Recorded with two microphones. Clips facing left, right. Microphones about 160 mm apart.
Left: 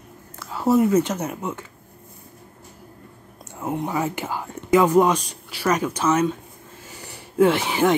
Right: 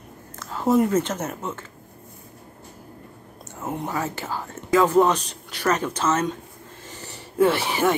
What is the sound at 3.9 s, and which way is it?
Speech, 15° left (ahead or behind).